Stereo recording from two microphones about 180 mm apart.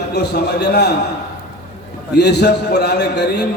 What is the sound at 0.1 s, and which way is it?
Speech, 65° left (ahead or behind).